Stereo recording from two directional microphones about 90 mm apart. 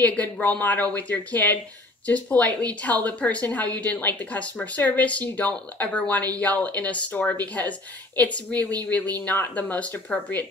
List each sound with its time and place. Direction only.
0.0 s speech: 15° left (ahead or behind)